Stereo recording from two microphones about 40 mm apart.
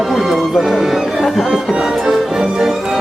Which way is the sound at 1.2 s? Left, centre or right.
Centre.